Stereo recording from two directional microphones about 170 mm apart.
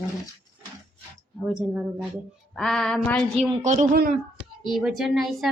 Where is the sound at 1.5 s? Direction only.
5° right (ahead or behind).